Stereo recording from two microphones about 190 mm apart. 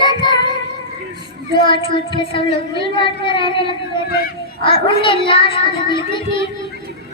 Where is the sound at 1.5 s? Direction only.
25° left (ahead or behind).